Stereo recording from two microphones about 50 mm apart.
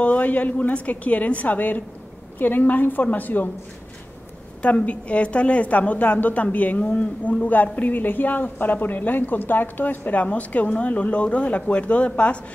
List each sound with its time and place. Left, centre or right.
0.0 s a woman's voice: left
4.6 s a woman's voice: left